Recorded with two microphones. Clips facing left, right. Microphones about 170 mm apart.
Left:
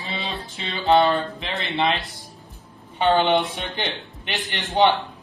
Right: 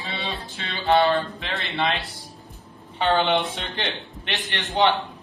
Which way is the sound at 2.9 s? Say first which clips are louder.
Left 2 dB; 15° left (ahead or behind).